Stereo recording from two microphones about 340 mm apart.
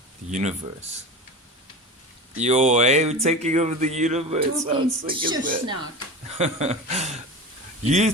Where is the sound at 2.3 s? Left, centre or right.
Centre.